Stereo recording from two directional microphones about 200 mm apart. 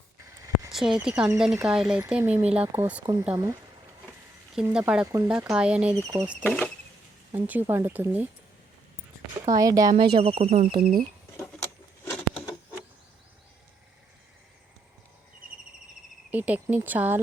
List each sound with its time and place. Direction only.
0.7 s speech: centre (ahead or behind)
6.4 s speech: 10° left (ahead or behind)
7.3 s speech: 10° right (ahead or behind)
9.5 s speech: 15° right (ahead or behind)
10.2 s speech: 30° right (ahead or behind)
12.0 s a sound: 5° left (ahead or behind)
16.3 s speech: 10° right (ahead or behind)